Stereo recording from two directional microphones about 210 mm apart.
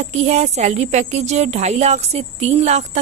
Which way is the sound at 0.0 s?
30° right (ahead or behind).